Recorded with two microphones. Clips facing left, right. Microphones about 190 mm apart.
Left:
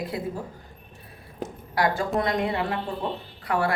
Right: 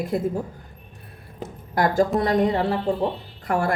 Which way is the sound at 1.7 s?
45° right (ahead or behind).